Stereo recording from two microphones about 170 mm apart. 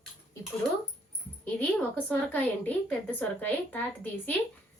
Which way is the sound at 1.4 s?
10° left (ahead or behind).